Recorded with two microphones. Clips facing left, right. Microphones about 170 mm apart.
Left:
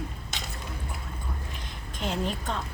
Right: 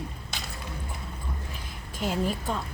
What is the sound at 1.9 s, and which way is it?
Speech, 5° right (ahead or behind).